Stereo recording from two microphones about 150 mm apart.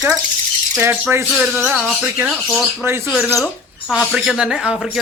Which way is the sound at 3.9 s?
Centre (ahead or behind).